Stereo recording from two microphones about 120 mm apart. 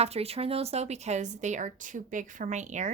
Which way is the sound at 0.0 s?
60° right (ahead or behind).